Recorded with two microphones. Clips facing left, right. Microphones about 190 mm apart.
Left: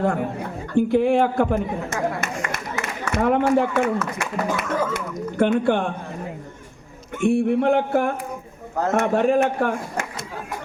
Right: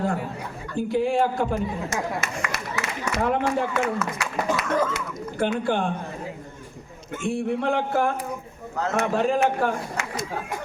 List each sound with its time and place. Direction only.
0.0 s a man's voice: 60° left (ahead or behind)
4.1 s a sound: 55° left (ahead or behind)
4.9 s speech: 55° left (ahead or behind)
7.2 s speech: 60° left (ahead or behind)